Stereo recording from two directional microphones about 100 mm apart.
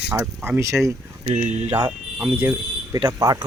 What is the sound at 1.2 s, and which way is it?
Speech, 90° right.